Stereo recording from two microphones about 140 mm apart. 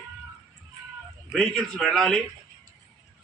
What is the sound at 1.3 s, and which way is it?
Speech, 5° left (ahead or behind).